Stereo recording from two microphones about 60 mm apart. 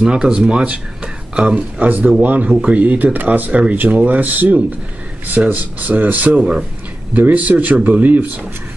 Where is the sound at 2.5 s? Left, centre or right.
Centre.